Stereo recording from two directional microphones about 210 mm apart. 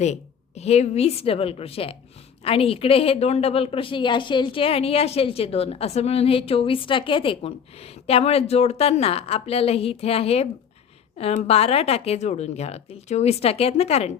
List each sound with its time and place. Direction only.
0.0 s a woman's voice: 30° left (ahead or behind)